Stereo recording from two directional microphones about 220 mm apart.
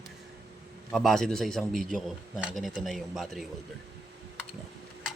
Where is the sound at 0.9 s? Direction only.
Centre (ahead or behind).